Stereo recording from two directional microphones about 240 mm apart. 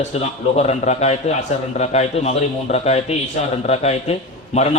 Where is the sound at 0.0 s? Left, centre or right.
Left.